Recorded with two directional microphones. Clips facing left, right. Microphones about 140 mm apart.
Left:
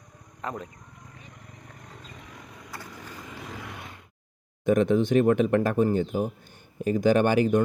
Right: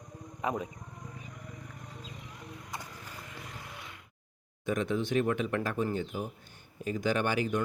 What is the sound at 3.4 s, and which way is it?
Vehicle, 90° left.